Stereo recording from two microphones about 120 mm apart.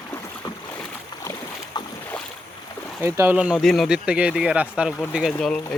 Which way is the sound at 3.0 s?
15° right (ahead or behind).